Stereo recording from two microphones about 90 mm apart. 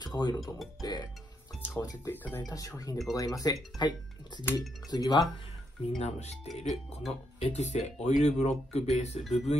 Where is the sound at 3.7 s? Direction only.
55° left (ahead or behind).